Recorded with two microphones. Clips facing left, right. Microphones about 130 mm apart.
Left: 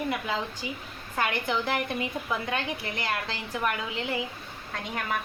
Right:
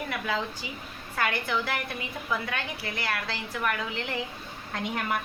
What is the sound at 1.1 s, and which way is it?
A woman's voice, 20° left (ahead or behind).